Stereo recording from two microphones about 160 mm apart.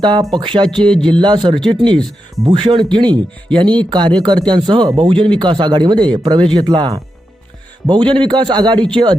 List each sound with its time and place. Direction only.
0.0 s speech: 30° right (ahead or behind)
0.9 s speech: 5° left (ahead or behind)
1.2 s speech: 30° right (ahead or behind)
2.0 s speech: centre (ahead or behind)
2.5 s speech: 30° right (ahead or behind)